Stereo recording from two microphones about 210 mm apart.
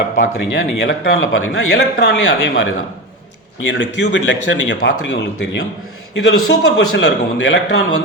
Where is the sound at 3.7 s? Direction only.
60° left (ahead or behind).